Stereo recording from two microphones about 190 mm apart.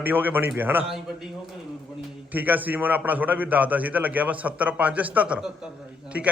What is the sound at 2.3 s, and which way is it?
A man's voice, 10° right (ahead or behind).